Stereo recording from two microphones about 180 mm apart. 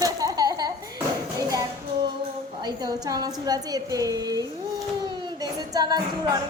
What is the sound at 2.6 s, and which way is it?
A woman's voice, 20° right (ahead or behind).